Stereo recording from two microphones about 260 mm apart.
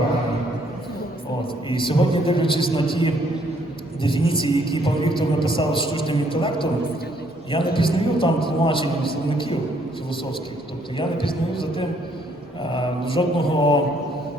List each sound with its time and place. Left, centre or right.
1.7 s a man's voice: centre
10.9 s a man's voice: centre